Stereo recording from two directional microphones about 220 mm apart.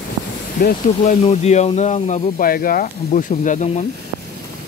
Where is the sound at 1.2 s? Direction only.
30° left (ahead or behind).